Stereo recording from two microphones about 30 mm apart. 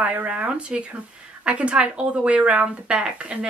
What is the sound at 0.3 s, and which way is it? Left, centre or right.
Speech, right.